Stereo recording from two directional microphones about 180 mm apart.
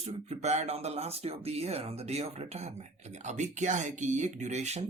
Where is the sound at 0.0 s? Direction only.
35° right (ahead or behind).